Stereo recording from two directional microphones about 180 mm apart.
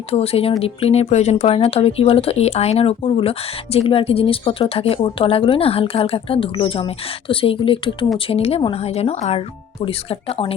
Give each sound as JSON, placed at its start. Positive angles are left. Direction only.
{"t": 0.1, "sound": "speech", "side_deg": 35}